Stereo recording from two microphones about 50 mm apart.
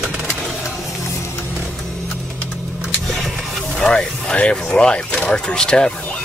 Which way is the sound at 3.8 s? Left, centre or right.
Centre.